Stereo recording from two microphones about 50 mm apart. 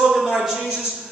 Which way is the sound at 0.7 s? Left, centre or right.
Centre.